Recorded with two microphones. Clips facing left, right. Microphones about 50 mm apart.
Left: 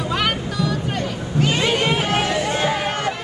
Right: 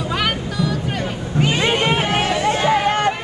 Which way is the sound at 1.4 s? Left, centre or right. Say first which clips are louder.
Right 1 dB; right.